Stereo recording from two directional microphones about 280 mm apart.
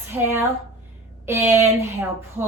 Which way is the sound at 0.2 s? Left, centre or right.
Centre.